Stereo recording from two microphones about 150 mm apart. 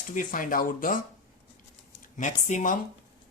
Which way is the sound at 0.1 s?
60° left (ahead or behind).